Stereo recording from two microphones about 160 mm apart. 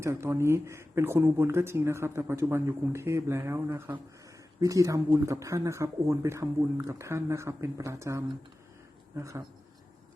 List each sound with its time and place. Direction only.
0.0 s speech: 15° right (ahead or behind)